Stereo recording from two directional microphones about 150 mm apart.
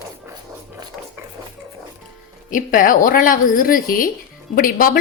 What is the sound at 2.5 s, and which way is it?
A woman's voice, 60° left (ahead or behind).